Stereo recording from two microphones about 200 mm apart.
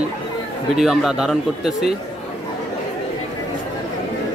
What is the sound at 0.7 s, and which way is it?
Speech, 5° right (ahead or behind).